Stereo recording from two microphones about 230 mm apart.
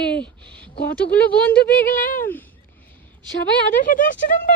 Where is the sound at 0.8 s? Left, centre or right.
Left.